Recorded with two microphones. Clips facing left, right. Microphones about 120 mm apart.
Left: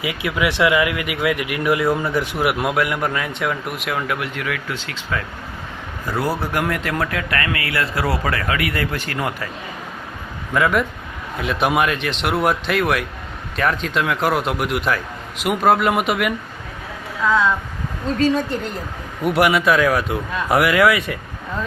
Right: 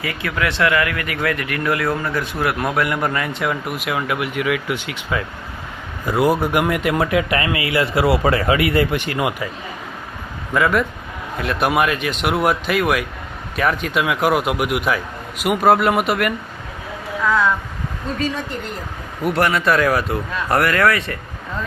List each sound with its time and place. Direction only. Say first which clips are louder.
0.0 s speech: left 1 dB; 10° left (ahead or behind)
2.7 s a man's voice: right 1 dB; centre (ahead or behind)
10.5 s a man's voice: right 1 dB; centre (ahead or behind)
19.2 s a man's voice: left 2 dB; 5° left (ahead or behind)